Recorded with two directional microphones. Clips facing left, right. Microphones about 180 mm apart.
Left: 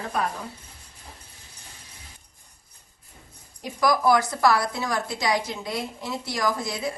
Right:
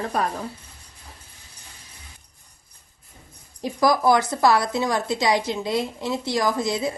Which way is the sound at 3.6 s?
30° right (ahead or behind).